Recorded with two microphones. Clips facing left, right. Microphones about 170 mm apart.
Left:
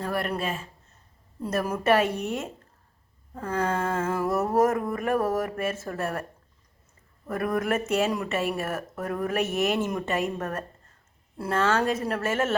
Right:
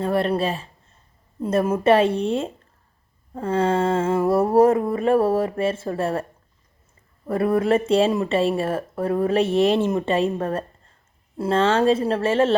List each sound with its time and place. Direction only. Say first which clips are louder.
0.0 s speech: right 7 dB; 25° right (ahead or behind)
7.3 s speech: right 7 dB; 30° right (ahead or behind)